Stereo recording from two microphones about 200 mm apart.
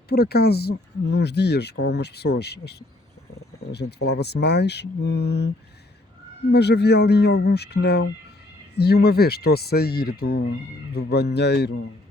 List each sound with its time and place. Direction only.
0.1 s speech: 50° left (ahead or behind)
6.5 s speech: 55° left (ahead or behind)